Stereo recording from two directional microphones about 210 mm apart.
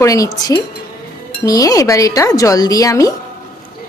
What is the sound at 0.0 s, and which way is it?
Speech, 15° left (ahead or behind).